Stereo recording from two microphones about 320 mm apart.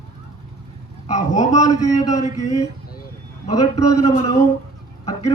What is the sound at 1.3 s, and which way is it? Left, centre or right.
Speech, left.